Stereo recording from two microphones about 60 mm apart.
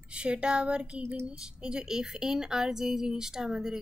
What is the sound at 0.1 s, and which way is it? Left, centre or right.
A woman's voice, centre.